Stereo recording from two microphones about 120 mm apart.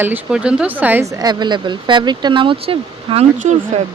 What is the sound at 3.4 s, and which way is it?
Speech, 70° right (ahead or behind).